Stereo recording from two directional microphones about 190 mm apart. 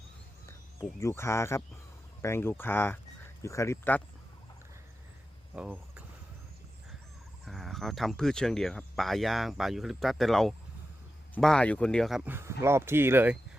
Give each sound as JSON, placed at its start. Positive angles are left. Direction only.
{"t": 0.4, "sound": "speech", "side_deg": 15}
{"t": 5.5, "sound": "speech", "side_deg": -10}
{"t": 7.4, "sound": "speech", "side_deg": 0}